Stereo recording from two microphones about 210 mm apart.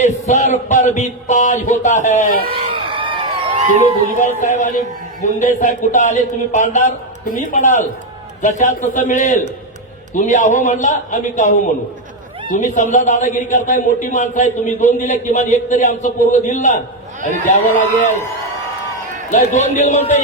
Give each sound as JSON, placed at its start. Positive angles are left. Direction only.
{"t": 0.0, "sound": "a man's voice", "side_deg": 35}
{"t": 2.5, "sound": "a sound", "side_deg": -25}
{"t": 4.2, "sound": "a man's voice", "side_deg": 35}
{"t": 19.3, "sound": "a man's voice", "side_deg": 35}